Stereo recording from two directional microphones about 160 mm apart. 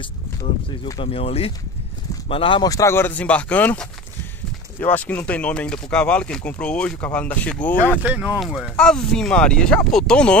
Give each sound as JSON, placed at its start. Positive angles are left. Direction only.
{"t": 0.9, "sound": "speech", "side_deg": 35}
{"t": 8.0, "sound": "speech", "side_deg": -10}